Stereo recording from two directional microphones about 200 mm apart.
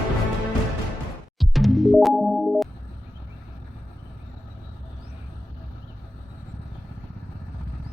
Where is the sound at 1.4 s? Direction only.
Centre (ahead or behind).